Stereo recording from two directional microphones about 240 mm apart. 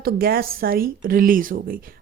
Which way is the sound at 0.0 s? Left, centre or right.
Right.